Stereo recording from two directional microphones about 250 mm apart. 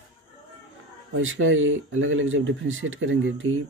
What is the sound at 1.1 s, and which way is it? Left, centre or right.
Speech, right.